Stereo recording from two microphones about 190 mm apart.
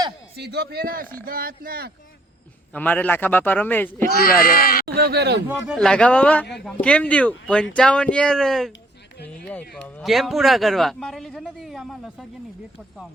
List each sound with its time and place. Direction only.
0.3 s a man's voice: 60° right (ahead or behind)
2.7 s a man's voice: 10° left (ahead or behind)
4.1 s speech: 50° left (ahead or behind)
4.9 s a man's voice: 55° right (ahead or behind)
5.7 s speech: 5° left (ahead or behind)